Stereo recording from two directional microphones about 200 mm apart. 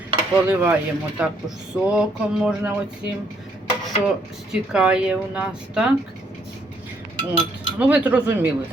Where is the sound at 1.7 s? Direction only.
5° right (ahead or behind).